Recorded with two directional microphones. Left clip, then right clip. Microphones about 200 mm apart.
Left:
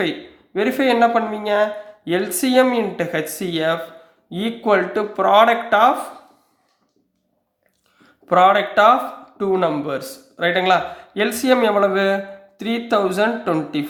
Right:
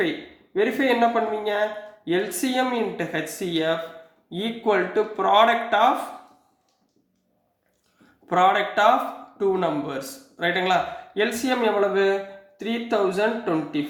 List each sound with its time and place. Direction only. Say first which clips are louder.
0.5 s a man's voice: left 4 dB; 45° left (ahead or behind)
8.3 s a man's voice: left 5 dB; 35° left (ahead or behind)